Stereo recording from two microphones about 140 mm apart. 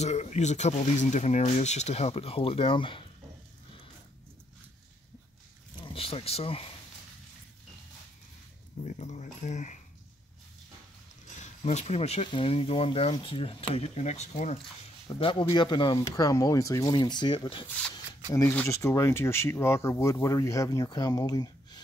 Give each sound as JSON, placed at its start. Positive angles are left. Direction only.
{"t": 0.0, "sound": "speech", "side_deg": 55}
{"t": 5.8, "sound": "speech", "side_deg": 40}
{"t": 8.8, "sound": "speech", "side_deg": 55}
{"t": 11.4, "sound": "speech", "side_deg": 50}
{"t": 15.0, "sound": "speech", "side_deg": 35}
{"t": 18.5, "sound": "speech", "side_deg": 15}